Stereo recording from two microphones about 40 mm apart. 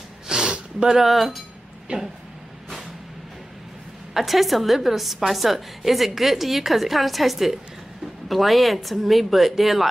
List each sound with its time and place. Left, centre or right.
0.3 s a sound: centre
0.9 s a woman's voice: centre
1.9 s speech: right
4.1 s a woman's voice: centre